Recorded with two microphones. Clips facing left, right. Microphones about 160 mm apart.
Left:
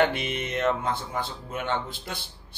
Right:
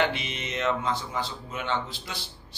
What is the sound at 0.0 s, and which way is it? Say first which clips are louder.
Speech: left 3 dB; 55° left (ahead or behind).